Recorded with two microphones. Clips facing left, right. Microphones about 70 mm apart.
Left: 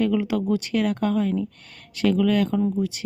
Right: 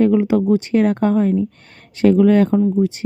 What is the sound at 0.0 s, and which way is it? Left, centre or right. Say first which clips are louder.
Speech: right 8 dB; right.